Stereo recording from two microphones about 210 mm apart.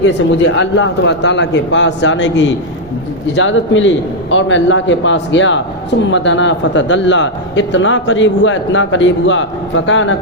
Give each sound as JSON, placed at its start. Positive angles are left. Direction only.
{"t": 0.4, "sound": "a man's voice", "side_deg": 60}